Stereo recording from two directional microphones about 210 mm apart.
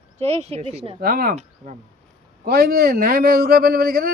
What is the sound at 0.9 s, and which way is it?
A man's voice, 45° right (ahead or behind).